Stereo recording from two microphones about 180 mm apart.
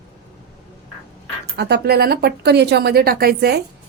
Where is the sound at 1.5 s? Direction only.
65° right (ahead or behind).